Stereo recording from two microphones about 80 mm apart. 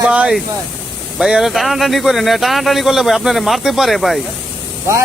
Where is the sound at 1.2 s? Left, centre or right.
Centre.